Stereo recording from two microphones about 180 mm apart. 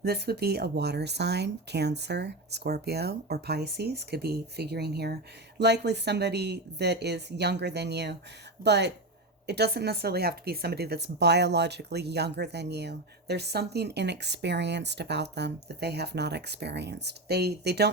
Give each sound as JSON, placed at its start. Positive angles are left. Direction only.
{"t": 0.0, "sound": "a woman's voice", "side_deg": -65}